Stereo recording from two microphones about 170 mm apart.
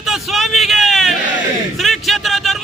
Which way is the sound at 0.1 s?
Centre (ahead or behind).